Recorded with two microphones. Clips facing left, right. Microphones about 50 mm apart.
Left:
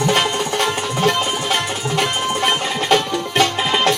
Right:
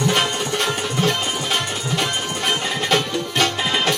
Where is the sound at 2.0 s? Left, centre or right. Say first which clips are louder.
Left 6 dB; centre.